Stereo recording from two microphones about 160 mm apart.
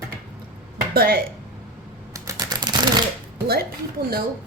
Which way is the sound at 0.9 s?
70° right (ahead or behind).